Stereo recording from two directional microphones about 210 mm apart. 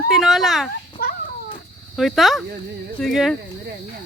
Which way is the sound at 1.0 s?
45° left (ahead or behind).